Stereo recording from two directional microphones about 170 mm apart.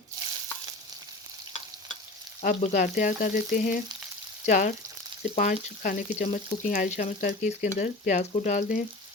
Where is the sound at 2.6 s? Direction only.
55° left (ahead or behind).